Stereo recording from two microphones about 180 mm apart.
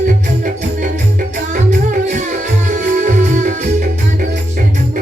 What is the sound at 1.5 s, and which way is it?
Music, 45° right (ahead or behind).